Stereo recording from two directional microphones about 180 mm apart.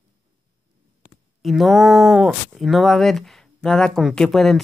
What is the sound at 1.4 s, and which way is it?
Speech, centre (ahead or behind).